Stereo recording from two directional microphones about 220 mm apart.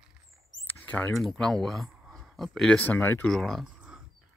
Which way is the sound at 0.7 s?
5° left (ahead or behind).